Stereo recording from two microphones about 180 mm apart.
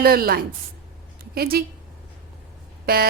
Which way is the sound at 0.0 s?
60° right (ahead or behind).